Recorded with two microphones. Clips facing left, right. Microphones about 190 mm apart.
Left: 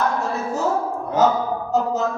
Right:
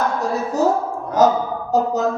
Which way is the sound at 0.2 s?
40° right (ahead or behind).